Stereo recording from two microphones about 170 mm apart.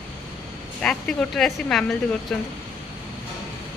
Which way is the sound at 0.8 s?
5° left (ahead or behind).